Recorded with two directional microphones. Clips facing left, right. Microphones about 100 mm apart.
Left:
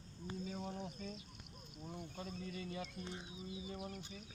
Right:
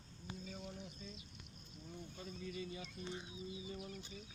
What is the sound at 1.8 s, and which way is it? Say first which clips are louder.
Speech: left 4 dB; 60° left (ahead or behind).